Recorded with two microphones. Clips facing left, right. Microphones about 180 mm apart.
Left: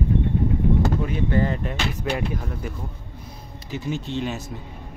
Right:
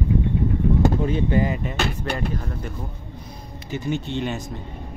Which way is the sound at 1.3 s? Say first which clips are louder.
Left 1 dB; 15° right (ahead or behind).